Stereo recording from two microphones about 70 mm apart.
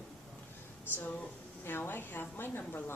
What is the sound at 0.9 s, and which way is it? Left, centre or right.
A woman's voice, left.